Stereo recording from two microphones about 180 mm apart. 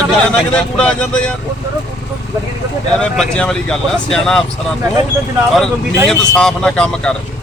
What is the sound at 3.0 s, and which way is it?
Speech, 5° left (ahead or behind).